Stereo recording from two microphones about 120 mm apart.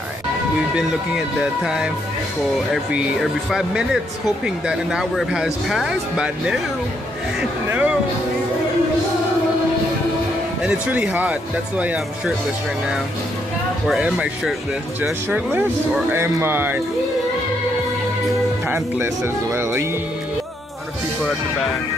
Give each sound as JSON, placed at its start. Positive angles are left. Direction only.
{"t": 0.7, "sound": "speech", "side_deg": -5}
{"t": 7.6, "sound": "speech", "side_deg": -15}
{"t": 10.6, "sound": "speech", "side_deg": -10}
{"t": 13.8, "sound": "speech", "side_deg": -5}
{"t": 18.7, "sound": "speech", "side_deg": -20}